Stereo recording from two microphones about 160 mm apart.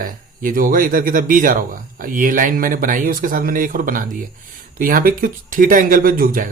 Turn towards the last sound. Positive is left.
turn(degrees=-60)  # may be behind; listen again after turning